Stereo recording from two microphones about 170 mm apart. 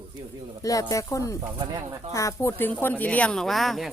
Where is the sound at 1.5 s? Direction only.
25° right (ahead or behind).